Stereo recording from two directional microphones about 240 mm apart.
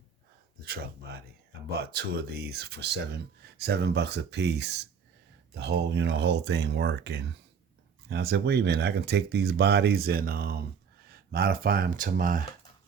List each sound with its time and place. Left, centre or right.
0.6 s speech: right